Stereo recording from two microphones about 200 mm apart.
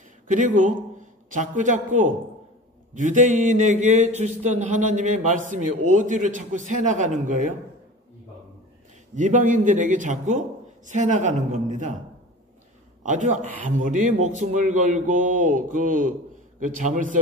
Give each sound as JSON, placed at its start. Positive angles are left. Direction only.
{"t": 0.3, "sound": "speech", "side_deg": -40}
{"t": 9.1, "sound": "speech", "side_deg": -40}
{"t": 13.0, "sound": "speech", "side_deg": -40}